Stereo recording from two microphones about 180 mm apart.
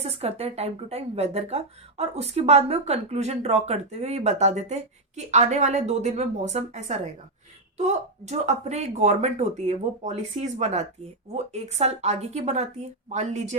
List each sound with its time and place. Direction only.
0.0 s speech: 35° right (ahead or behind)